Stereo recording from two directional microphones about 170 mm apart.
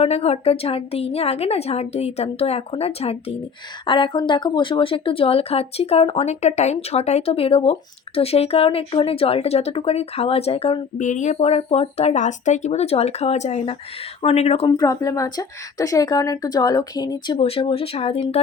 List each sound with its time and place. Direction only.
0.0 s speech: 35° left (ahead or behind)
11.0 s speech: 45° left (ahead or behind)
14.7 s speech: 20° left (ahead or behind); by 18.4 s 35° left (ahead or behind)